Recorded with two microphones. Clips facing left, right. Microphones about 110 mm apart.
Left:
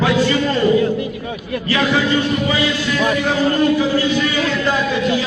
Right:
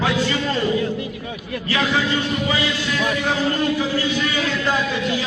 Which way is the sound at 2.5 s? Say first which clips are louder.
Left 4 dB; 65° left (ahead or behind).